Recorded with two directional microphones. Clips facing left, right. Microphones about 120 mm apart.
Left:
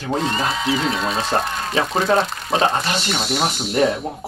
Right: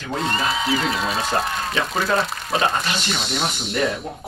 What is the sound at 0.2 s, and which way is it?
Speech, centre (ahead or behind).